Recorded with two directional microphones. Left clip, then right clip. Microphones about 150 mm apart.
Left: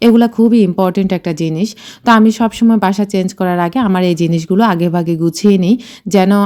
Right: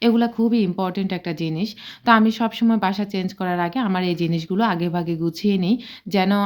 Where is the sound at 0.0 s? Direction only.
50° left (ahead or behind).